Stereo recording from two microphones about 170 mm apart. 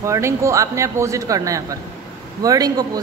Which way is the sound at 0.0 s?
15° right (ahead or behind).